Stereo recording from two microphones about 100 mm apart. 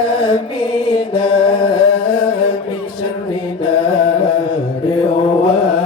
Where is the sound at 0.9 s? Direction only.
55° left (ahead or behind).